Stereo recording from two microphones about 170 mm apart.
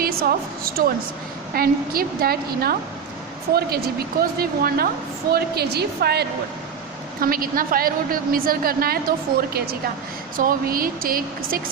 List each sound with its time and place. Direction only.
0.0 s a woman's voice: 60° right (ahead or behind)
4.2 s a woman's voice: 60° right (ahead or behind)
7.2 s a woman's voice: 55° right (ahead or behind)